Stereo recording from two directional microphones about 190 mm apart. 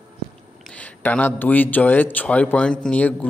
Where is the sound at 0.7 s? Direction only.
5° left (ahead or behind).